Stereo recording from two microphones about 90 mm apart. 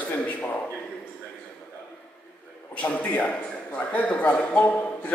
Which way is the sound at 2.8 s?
15° left (ahead or behind).